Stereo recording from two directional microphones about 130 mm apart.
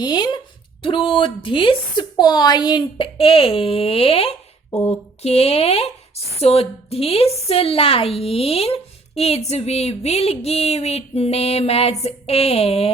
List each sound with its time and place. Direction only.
0.0 s a woman's voice: 35° left (ahead or behind); by 12.9 s 50° left (ahead or behind)